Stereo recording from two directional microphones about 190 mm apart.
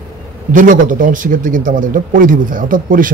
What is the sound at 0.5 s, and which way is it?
Speech, 45° right (ahead or behind).